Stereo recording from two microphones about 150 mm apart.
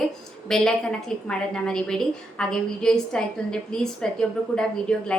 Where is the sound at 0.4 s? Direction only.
5° left (ahead or behind).